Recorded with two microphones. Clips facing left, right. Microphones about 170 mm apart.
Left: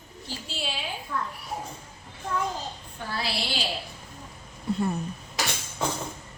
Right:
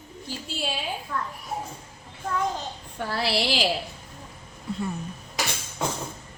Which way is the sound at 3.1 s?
65° right (ahead or behind).